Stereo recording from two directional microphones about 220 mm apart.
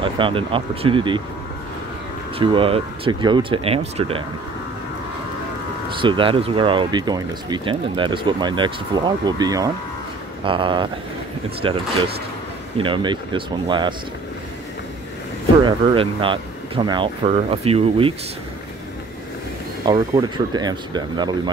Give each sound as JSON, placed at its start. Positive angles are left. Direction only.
{"t": 0.0, "sound": "speech", "side_deg": -25}
{"t": 2.3, "sound": "speech", "side_deg": -25}
{"t": 5.9, "sound": "speech", "side_deg": -20}
{"t": 15.6, "sound": "speech", "side_deg": -25}
{"t": 19.9, "sound": "speech", "side_deg": -20}